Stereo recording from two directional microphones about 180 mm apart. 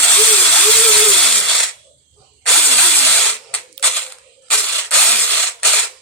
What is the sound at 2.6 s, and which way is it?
Drill, 10° left (ahead or behind).